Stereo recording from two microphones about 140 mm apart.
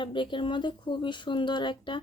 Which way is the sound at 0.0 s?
35° left (ahead or behind).